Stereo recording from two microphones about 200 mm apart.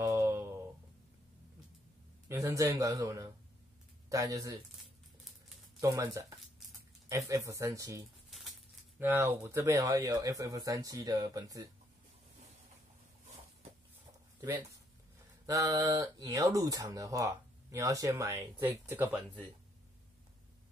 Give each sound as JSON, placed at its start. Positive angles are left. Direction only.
{"t": 0.0, "sound": "a sound", "side_deg": -15}
{"t": 2.2, "sound": "speech", "side_deg": -15}
{"t": 5.8, "sound": "speech", "side_deg": -15}
{"t": 15.4, "sound": "speech", "side_deg": -15}